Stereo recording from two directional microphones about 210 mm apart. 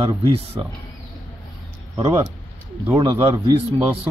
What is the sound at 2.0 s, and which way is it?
Speech, 15° right (ahead or behind).